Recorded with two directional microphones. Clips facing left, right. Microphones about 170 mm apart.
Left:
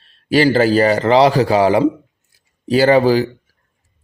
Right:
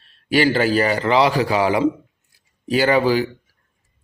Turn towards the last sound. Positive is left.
turn(degrees=35)  # may be behind; listen again after turning